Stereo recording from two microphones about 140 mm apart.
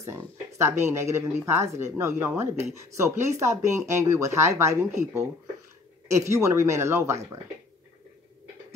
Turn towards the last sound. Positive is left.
turn(degrees=-20)  # may be behind; listen again after turning